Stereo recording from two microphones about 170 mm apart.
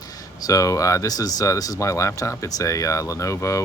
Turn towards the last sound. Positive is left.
turn(degrees=20)  # may be behind; listen again after turning